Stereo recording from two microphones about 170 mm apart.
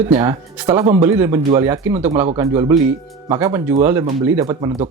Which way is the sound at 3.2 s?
20° right (ahead or behind).